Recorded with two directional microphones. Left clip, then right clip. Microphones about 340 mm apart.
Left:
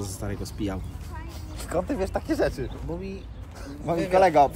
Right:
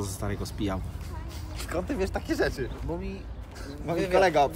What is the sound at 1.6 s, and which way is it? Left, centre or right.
Speech, centre.